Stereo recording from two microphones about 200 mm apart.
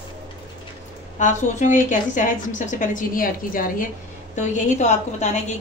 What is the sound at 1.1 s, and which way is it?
A woman's voice, 40° left (ahead or behind).